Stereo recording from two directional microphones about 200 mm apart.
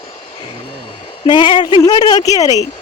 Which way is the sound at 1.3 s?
25° left (ahead or behind).